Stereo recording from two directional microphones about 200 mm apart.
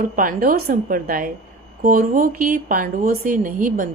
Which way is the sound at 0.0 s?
45° right (ahead or behind).